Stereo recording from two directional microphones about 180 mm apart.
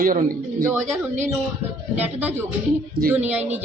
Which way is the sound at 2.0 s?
10° right (ahead or behind).